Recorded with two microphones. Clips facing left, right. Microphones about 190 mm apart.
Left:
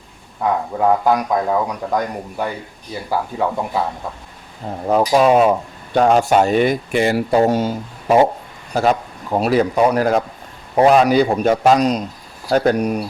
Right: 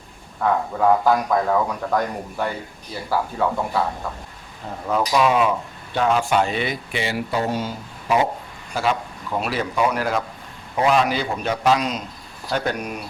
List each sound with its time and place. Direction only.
0.4 s speech: 15° left (ahead or behind)
4.9 s a man's voice: 35° left (ahead or behind)